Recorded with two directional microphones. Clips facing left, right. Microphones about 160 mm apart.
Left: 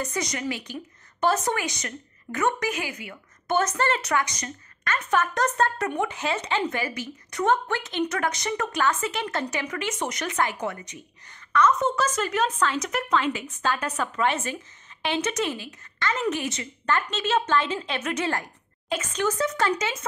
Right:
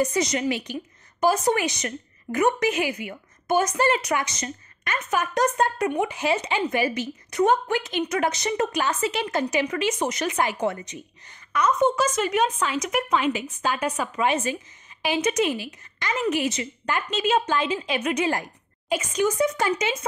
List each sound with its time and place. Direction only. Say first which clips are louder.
0.0 s a woman's voice: right 6 dB; 20° right (ahead or behind)
11.5 s a woman's voice: right 1 dB; 15° right (ahead or behind)